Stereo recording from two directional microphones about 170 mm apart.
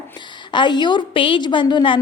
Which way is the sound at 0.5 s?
25° left (ahead or behind).